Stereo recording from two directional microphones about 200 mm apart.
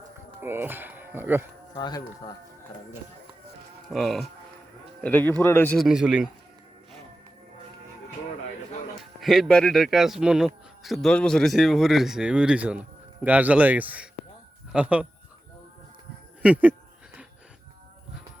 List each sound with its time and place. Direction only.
0.4 s speech: 10° right (ahead or behind)
1.7 s speech: 20° left (ahead or behind)
3.8 s speech: centre (ahead or behind)
9.2 s speech: centre (ahead or behind)
16.4 s speech: 5° right (ahead or behind)